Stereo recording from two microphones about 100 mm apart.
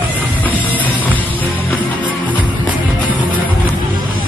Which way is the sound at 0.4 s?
15° left (ahead or behind).